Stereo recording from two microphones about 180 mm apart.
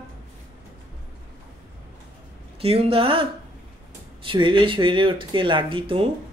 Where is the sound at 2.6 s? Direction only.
30° right (ahead or behind).